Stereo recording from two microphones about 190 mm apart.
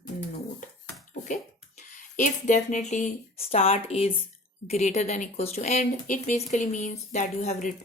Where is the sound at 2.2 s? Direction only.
40° left (ahead or behind).